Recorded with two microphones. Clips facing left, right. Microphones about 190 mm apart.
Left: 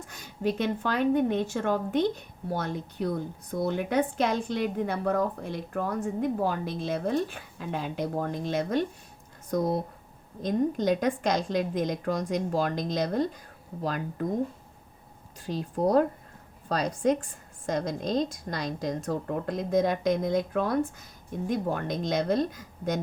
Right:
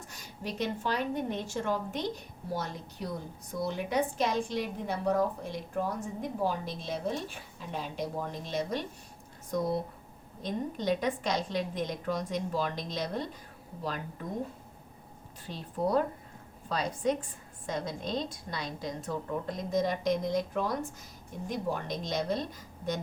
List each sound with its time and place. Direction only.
0.1 s a woman's voice: 55° left (ahead or behind)
15.4 s a woman's voice: 45° left (ahead or behind)